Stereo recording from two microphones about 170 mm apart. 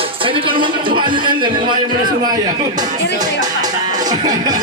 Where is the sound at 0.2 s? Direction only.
30° right (ahead or behind).